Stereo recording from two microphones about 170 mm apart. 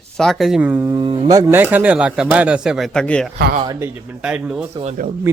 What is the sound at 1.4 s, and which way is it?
Speech, 10° right (ahead or behind).